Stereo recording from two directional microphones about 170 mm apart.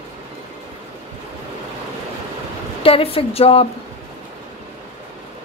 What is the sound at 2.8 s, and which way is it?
Speech, 35° left (ahead or behind).